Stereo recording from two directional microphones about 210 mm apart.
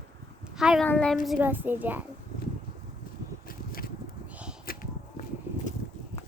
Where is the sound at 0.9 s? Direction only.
5° left (ahead or behind).